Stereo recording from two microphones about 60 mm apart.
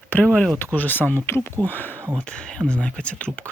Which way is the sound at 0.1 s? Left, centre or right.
Left.